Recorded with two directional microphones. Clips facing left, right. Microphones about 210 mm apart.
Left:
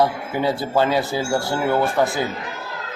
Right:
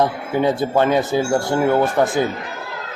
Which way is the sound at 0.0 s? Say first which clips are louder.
Right 2 dB; 20° right (ahead or behind).